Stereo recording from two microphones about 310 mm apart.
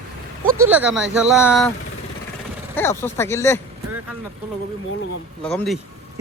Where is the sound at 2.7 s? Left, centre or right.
Centre.